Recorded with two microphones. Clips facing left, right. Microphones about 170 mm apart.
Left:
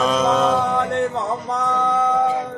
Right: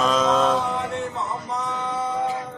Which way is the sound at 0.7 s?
60° left (ahead or behind).